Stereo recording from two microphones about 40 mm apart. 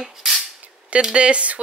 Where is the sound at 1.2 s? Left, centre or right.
Right.